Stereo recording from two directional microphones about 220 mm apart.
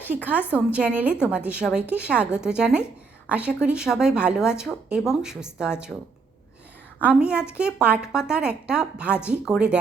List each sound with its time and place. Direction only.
0.5 s a woman's voice: 5° right (ahead or behind)
7.0 s speech: 5° right (ahead or behind)